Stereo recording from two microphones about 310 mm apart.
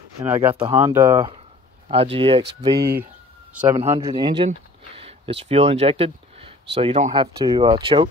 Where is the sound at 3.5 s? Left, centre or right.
Centre.